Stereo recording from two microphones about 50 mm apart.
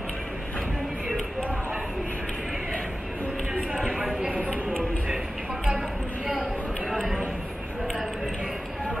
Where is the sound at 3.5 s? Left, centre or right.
Right.